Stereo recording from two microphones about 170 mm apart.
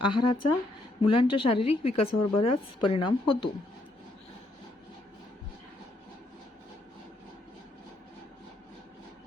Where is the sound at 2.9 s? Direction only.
30° left (ahead or behind).